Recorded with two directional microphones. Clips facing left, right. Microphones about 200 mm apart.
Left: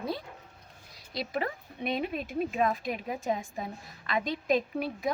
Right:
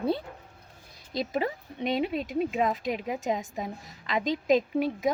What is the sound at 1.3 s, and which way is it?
A woman's voice, 20° right (ahead or behind).